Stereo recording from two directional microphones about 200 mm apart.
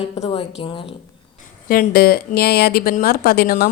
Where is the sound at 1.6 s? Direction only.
45° left (ahead or behind).